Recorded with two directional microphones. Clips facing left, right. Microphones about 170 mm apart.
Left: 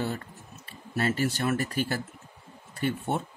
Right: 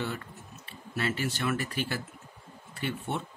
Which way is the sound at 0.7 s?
45° left (ahead or behind).